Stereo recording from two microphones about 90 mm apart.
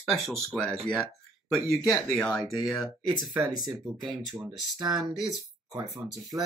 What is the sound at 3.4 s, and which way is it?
Speech, 50° right (ahead or behind).